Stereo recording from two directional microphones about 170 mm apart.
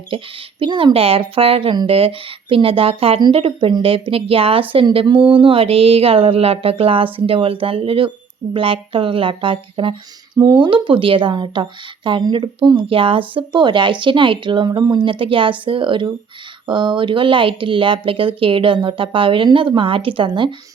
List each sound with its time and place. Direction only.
0.6 s speech: 30° right (ahead or behind)